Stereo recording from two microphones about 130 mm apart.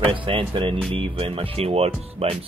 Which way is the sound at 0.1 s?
40° right (ahead or behind).